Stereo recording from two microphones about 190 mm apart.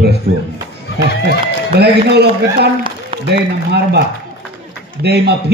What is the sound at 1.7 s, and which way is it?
A man's voice, 60° right (ahead or behind).